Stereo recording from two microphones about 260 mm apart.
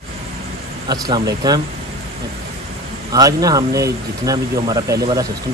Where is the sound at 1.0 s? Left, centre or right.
Centre.